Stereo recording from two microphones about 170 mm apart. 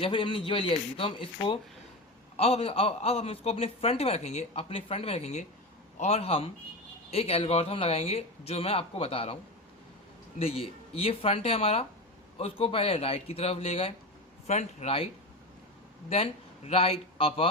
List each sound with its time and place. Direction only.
0.0 s a man's voice: 30° left (ahead or behind)